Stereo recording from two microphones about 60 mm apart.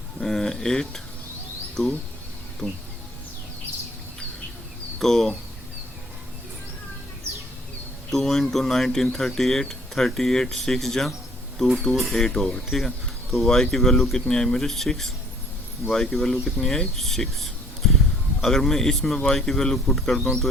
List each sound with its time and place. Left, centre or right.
0.2 s dishes: centre
1.8 s speech: centre
2.6 s speech: left
4.9 s speech: centre
8.1 s speech: centre